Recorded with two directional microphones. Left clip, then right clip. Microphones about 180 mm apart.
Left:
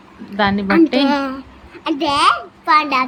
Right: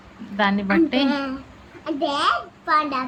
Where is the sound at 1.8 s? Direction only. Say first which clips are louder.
Left 7 dB; 65° left (ahead or behind).